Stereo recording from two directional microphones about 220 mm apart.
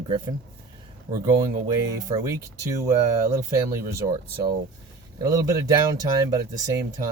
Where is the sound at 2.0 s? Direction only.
15° right (ahead or behind).